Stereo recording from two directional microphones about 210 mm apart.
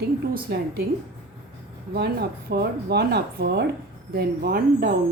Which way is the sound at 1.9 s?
50° right (ahead or behind).